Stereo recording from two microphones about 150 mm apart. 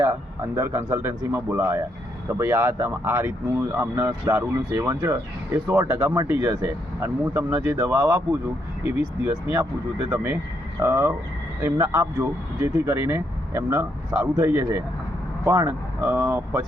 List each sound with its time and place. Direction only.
0.0 s speech: 20° right (ahead or behind)
10.8 s speech: 15° right (ahead or behind)